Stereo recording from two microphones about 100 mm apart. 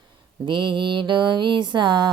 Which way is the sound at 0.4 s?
55° right (ahead or behind).